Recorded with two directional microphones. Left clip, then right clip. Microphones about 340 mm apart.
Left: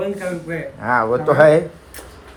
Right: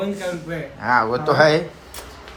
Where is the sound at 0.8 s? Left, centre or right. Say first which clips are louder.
Left 1 dB; centre.